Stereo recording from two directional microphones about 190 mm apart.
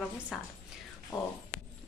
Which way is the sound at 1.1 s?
20° left (ahead or behind).